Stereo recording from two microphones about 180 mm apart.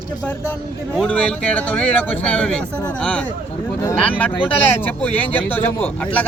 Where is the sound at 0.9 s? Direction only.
5° left (ahead or behind).